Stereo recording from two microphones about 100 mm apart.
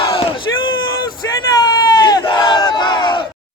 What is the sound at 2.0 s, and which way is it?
Battle cry, 45° left (ahead or behind).